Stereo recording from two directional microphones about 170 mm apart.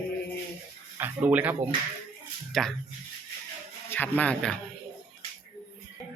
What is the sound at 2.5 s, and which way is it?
Speech, centre (ahead or behind).